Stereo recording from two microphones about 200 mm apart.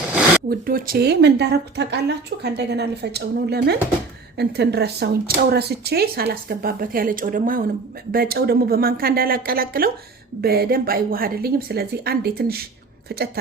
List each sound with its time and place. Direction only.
0.4 s speech: 45° right (ahead or behind)